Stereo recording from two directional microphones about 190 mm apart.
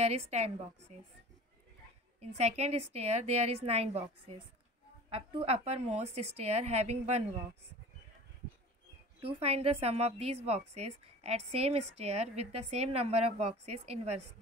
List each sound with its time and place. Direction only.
0.0 s a woman's voice: 35° right (ahead or behind)
2.1 s a woman's voice: 35° right (ahead or behind)
9.2 s a woman's voice: 30° right (ahead or behind)